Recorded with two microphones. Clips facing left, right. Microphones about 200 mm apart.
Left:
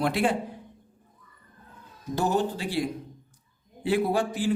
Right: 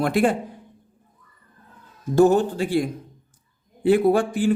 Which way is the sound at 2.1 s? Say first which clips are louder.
Right 9 dB; 50° right (ahead or behind).